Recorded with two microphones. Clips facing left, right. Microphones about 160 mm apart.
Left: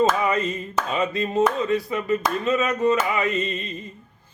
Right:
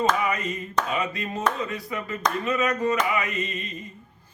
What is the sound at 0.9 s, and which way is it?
Speech, 30° left (ahead or behind).